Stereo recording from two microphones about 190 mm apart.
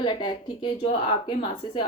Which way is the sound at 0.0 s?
25° left (ahead or behind).